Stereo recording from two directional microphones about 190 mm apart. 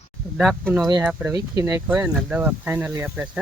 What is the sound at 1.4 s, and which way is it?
Speech, 20° right (ahead or behind).